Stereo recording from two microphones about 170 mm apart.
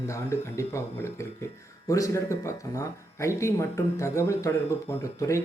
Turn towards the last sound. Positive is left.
turn(degrees=15)  # may be behind; listen again after turning